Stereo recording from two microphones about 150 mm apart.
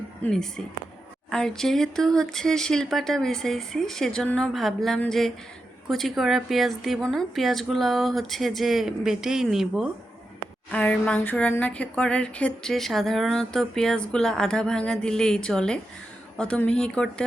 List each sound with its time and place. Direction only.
0.2 s speech: 5° left (ahead or behind)